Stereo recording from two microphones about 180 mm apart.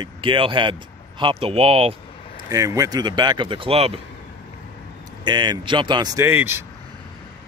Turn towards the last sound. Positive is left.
turn(degrees=-10)  # may be behind; listen again after turning